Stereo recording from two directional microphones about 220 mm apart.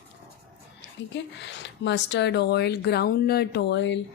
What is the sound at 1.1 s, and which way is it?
A woman's voice, 55° left (ahead or behind).